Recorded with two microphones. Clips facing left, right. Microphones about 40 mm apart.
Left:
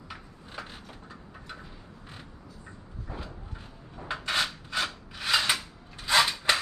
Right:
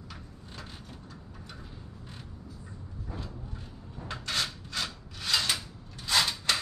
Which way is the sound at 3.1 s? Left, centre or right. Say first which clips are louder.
Left 1 dB; centre.